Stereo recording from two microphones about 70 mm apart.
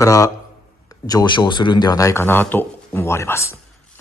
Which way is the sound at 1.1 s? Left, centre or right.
Left.